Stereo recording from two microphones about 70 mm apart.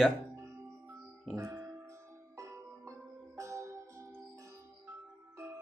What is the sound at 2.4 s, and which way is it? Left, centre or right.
Music, right.